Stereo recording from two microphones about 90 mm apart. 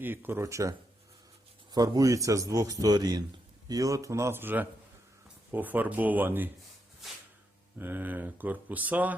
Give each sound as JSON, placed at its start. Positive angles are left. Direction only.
{"t": 0.0, "sound": "speech", "side_deg": -20}
{"t": 7.0, "sound": "a sound", "side_deg": 0}
{"t": 7.8, "sound": "speech", "side_deg": -20}